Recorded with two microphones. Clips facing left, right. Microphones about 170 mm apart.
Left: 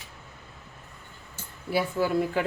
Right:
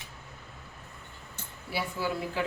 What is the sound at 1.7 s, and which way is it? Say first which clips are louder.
Speech: left 7 dB; 50° left (ahead or behind).